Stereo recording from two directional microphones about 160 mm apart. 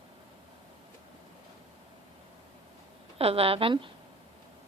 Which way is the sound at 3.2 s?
35° right (ahead or behind).